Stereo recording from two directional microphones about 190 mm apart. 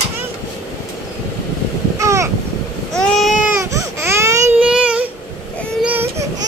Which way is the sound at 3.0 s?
Centre (ahead or behind).